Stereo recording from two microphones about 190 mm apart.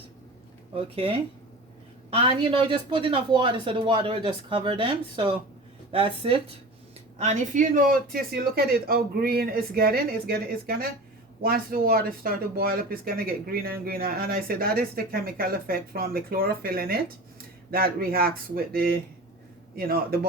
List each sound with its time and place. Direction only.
0.9 s speech: 30° right (ahead or behind)
7.2 s speech: 40° right (ahead or behind)
19.7 s speech: 50° right (ahead or behind)